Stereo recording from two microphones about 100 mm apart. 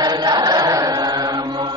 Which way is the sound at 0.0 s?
40° right (ahead or behind).